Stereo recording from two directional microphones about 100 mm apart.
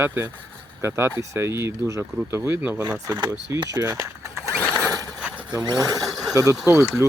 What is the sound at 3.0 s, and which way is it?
Speech, 35° right (ahead or behind).